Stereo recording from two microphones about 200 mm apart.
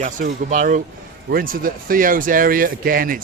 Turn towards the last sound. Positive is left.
turn(degrees=-45)  # may be behind; listen again after turning